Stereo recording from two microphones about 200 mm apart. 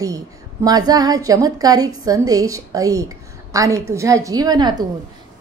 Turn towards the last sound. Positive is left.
turn(degrees=-20)  # may be behind; listen again after turning